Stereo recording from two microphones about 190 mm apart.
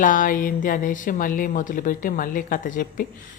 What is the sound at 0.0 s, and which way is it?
Speech, 45° left (ahead or behind).